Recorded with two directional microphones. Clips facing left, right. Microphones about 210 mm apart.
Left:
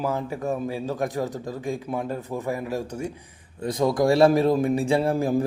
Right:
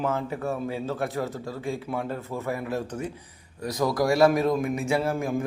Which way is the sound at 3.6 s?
25° left (ahead or behind).